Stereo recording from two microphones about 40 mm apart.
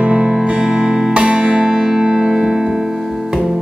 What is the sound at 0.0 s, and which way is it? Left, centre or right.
Music, right.